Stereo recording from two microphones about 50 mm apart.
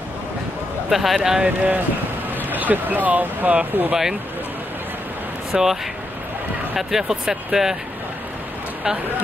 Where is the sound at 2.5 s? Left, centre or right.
Right.